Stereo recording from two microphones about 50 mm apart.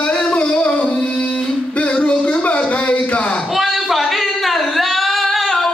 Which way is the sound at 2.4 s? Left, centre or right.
Left.